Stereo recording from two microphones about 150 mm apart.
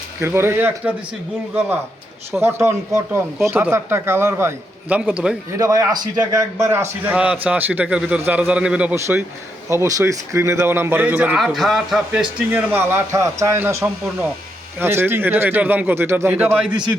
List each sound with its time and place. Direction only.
0.2 s a man's voice: 15° right (ahead or behind)
2.3 s a man's voice: 15° right (ahead or behind)
5.5 s a man's voice: 25° right (ahead or behind)
11.3 s speech: centre (ahead or behind)
12.5 s a man's voice: 15° right (ahead or behind)